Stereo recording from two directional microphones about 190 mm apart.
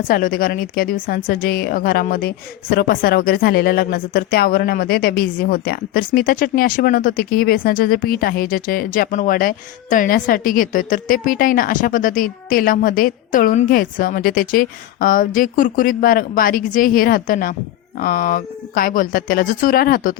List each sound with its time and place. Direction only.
0.1 s a woman's voice: 50° left (ahead or behind)